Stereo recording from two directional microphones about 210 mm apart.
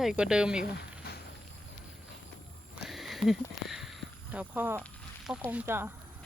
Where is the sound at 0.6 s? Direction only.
50° left (ahead or behind).